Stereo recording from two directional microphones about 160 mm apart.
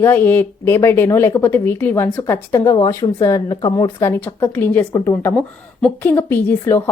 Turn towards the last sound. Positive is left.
turn(degrees=15)  # may be behind; listen again after turning